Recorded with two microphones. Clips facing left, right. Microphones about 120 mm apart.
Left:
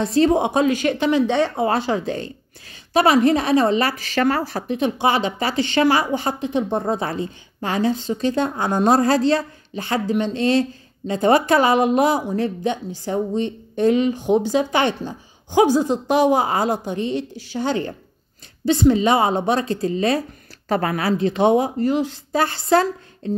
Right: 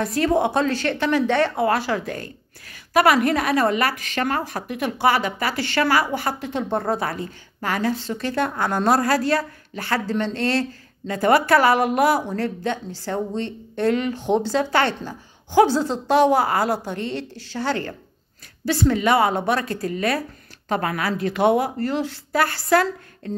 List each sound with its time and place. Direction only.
0.0 s speech: 25° left (ahead or behind)
20.6 s speech: 35° left (ahead or behind)